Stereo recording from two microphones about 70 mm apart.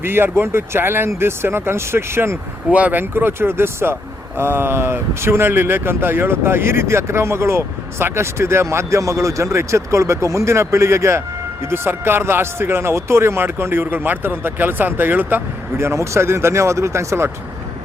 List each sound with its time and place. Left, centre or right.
0.0 s speech: right
2.7 s speech: right
15.8 s speech: right